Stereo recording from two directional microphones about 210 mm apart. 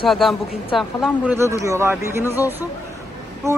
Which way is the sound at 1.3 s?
15° right (ahead or behind).